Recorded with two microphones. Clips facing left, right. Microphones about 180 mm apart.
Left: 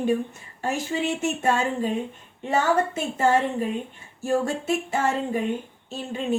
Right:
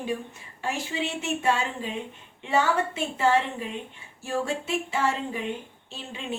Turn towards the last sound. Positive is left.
turn(degrees=45)  # may be behind; listen again after turning